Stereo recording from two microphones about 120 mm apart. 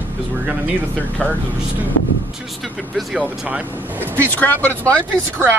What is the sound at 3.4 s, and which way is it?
Speech, 15° right (ahead or behind).